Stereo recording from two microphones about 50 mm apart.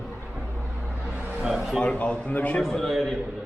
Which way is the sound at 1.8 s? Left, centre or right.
Left.